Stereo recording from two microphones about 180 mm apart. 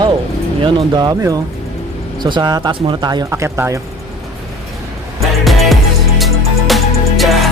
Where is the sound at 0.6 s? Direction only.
25° right (ahead or behind).